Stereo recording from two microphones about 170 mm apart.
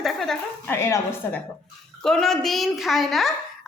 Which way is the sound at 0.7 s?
15° left (ahead or behind).